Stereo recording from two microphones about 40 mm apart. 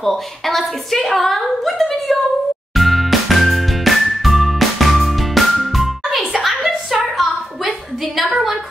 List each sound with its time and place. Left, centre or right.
0.0 s speech: centre
2.7 s music: centre
6.4 s a sound: centre
8.2 s speech: centre